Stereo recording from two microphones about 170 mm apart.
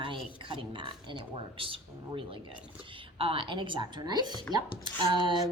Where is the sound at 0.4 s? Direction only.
30° right (ahead or behind).